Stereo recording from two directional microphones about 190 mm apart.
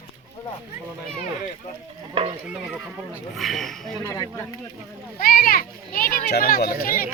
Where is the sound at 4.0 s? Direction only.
15° left (ahead or behind).